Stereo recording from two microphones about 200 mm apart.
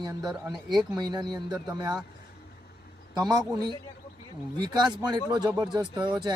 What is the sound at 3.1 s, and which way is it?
Speech, 20° right (ahead or behind).